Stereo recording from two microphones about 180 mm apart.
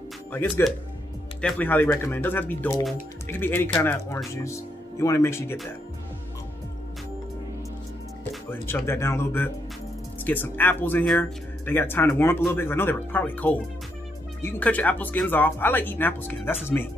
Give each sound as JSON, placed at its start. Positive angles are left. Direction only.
{"t": 1.4, "sound": "speech", "side_deg": 10}
{"t": 8.6, "sound": "speech", "side_deg": 15}